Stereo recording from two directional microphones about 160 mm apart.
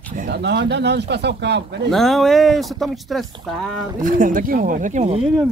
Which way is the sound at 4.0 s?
55° right (ahead or behind).